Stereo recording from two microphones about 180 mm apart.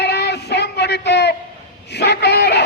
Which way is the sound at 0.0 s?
70° left (ahead or behind).